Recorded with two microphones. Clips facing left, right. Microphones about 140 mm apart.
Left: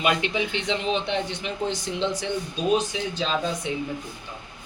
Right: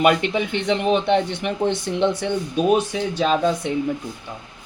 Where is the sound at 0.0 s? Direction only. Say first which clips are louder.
Right 6 dB; 55° right (ahead or behind).